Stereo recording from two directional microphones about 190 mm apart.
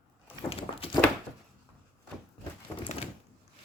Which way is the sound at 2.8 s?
35° left (ahead or behind).